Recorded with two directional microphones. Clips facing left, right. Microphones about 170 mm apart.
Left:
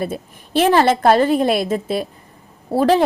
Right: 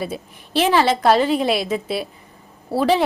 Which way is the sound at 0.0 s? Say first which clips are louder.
Left 3 dB; 50° left (ahead or behind).